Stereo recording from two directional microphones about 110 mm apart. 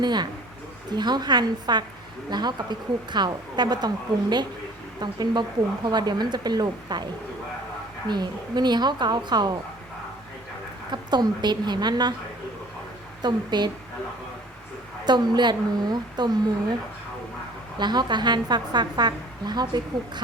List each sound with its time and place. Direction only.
0.0 s a woman's voice: 40° right (ahead or behind)
10.9 s a woman's voice: 40° right (ahead or behind)
13.2 s a woman's voice: 40° right (ahead or behind)
15.0 s a woman's voice: 40° right (ahead or behind)
17.7 s a woman's voice: 40° right (ahead or behind)